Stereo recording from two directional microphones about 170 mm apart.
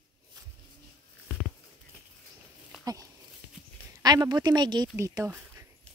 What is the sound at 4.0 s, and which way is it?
Speech, 25° right (ahead or behind).